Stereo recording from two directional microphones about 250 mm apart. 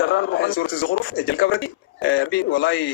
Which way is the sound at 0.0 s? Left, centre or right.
Left.